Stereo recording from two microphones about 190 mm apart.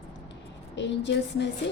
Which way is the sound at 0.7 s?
65° left (ahead or behind).